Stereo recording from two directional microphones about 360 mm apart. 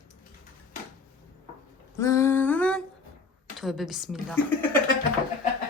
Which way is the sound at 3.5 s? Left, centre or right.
Centre.